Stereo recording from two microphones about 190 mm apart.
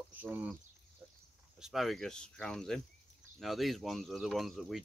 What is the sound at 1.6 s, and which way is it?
Speech, centre (ahead or behind).